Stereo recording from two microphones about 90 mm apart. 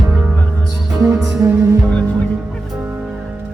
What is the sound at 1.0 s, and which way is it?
Music, 35° right (ahead or behind).